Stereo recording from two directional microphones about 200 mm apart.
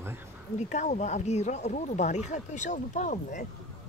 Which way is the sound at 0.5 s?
35° left (ahead or behind).